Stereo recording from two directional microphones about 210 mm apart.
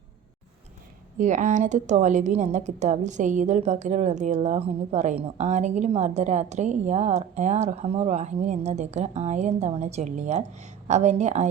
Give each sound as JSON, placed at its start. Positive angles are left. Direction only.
{"t": 1.2, "sound": "a woman's voice", "side_deg": -35}